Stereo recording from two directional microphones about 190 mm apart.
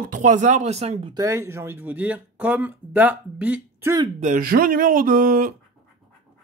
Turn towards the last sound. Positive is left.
turn(degrees=-45)  # may be behind; listen again after turning